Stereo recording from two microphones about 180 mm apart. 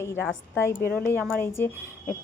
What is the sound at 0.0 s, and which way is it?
A woman's voice, 15° left (ahead or behind).